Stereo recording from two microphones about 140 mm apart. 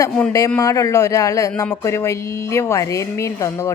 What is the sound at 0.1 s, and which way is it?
Speech, 10° left (ahead or behind).